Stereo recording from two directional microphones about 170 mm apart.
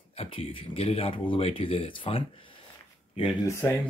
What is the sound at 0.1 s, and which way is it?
Speech, 35° left (ahead or behind).